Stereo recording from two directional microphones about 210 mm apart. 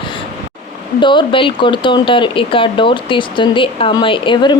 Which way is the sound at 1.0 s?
20° left (ahead or behind).